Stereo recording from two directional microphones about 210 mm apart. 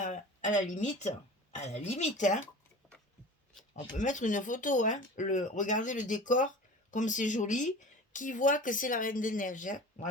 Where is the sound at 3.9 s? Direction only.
35° left (ahead or behind).